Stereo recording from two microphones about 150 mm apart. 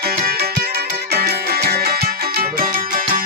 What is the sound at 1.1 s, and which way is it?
Music, 90° right.